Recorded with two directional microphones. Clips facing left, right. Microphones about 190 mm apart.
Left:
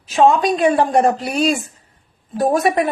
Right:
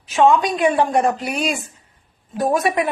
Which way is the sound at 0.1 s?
35° left (ahead or behind).